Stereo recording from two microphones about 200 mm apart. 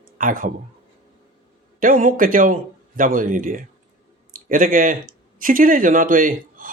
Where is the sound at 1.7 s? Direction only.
40° right (ahead or behind).